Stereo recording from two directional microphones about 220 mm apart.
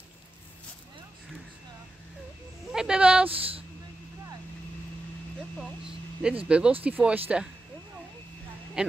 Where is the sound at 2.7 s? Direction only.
5° right (ahead or behind).